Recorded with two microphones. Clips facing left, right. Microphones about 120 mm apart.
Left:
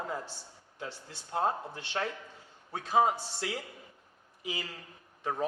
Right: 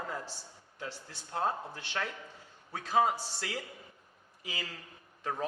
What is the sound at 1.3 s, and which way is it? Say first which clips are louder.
A man's voice: left 2 dB; 20° left (ahead or behind).